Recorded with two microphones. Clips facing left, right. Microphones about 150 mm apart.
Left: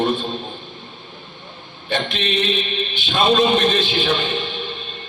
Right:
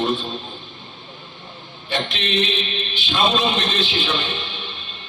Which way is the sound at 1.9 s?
55° left (ahead or behind).